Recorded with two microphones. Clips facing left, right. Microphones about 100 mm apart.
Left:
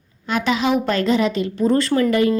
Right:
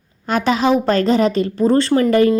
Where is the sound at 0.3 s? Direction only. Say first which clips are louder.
Right 4 dB; 40° right (ahead or behind).